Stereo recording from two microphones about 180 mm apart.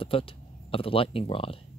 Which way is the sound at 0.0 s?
30° left (ahead or behind).